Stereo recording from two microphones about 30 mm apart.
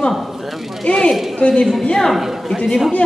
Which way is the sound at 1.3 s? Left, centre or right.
Left.